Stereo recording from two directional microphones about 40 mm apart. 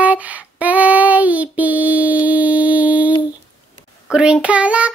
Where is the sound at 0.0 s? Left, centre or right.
Right.